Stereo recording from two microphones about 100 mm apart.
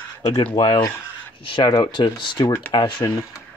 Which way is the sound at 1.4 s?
55° left (ahead or behind).